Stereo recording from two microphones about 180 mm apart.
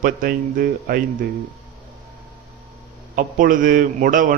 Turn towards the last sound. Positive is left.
turn(degrees=-50)  # may be behind; listen again after turning